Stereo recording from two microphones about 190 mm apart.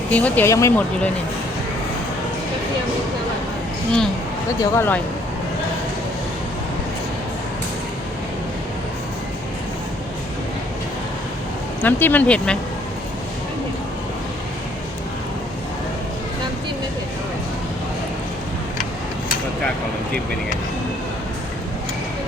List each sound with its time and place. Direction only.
0.1 s speech: 10° left (ahead or behind)
4.6 s speech: 15° left (ahead or behind)
11.8 s speech: 10° left (ahead or behind)